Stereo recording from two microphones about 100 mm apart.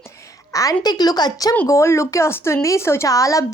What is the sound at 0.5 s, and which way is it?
Speech, 35° left (ahead or behind).